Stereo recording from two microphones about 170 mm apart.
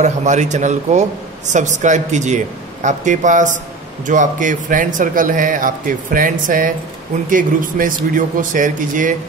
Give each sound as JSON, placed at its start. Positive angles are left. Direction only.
{"t": 0.0, "sound": "a man's voice", "side_deg": -45}